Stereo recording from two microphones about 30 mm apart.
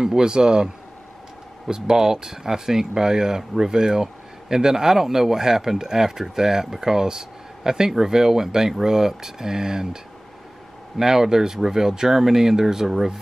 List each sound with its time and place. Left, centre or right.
0.0 s speech: right
1.7 s speech: centre
11.0 s speech: centre